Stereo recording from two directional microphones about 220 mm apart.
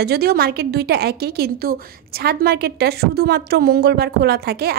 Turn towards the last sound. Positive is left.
turn(degrees=-45)  # may be behind; listen again after turning